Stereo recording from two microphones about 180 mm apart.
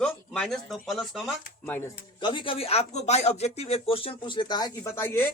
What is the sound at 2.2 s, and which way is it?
Speech, 25° left (ahead or behind).